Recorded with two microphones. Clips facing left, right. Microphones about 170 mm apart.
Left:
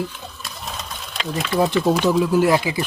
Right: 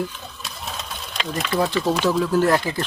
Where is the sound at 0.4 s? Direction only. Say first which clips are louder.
Even; centre (ahead or behind).